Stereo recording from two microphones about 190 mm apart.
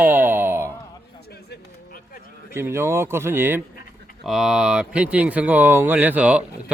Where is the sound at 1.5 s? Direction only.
50° left (ahead or behind).